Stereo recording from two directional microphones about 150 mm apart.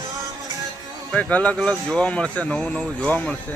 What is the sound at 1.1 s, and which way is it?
Speech, 10° left (ahead or behind).